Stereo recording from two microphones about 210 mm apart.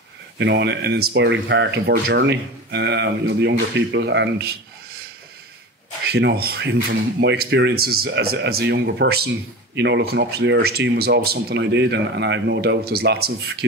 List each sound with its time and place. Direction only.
0.4 s speech: 55° right (ahead or behind)
6.0 s speech: 50° right (ahead or behind)